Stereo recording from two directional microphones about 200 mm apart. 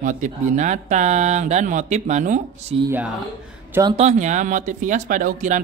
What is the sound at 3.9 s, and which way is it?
Speech, 35° right (ahead or behind).